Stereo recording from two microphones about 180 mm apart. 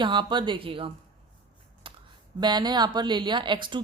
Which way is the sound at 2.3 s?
25° right (ahead or behind).